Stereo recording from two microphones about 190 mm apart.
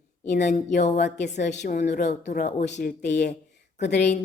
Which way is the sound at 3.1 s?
60° left (ahead or behind).